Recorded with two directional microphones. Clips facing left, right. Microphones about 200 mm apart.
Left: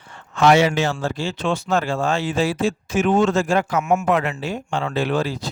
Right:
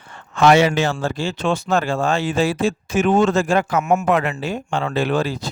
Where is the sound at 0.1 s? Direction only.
55° right (ahead or behind).